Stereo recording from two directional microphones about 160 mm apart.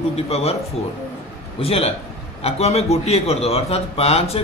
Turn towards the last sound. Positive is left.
turn(degrees=40)  # may be behind; listen again after turning